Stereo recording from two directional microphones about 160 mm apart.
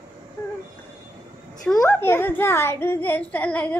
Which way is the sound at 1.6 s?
5° left (ahead or behind).